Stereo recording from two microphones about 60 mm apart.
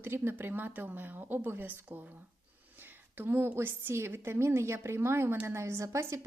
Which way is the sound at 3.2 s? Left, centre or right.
Right.